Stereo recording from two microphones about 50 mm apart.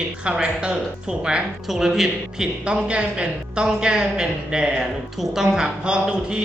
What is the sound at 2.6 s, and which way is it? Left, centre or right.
A woman's voice, centre.